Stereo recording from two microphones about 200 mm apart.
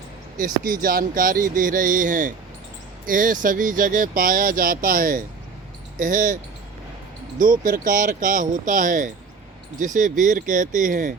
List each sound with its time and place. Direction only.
0.3 s speech: 45° right (ahead or behind)